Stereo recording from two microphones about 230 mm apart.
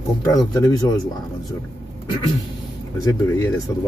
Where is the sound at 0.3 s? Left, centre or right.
Centre.